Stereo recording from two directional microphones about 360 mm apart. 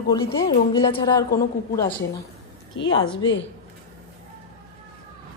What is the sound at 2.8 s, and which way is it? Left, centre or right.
Speech, centre.